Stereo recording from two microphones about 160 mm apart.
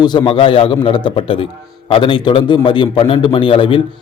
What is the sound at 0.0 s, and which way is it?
A man's voice, 30° left (ahead or behind).